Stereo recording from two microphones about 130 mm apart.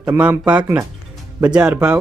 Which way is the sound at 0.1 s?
10° right (ahead or behind).